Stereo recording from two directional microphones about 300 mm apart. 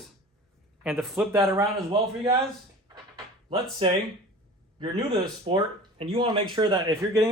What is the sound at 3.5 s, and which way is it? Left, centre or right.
Speech, centre.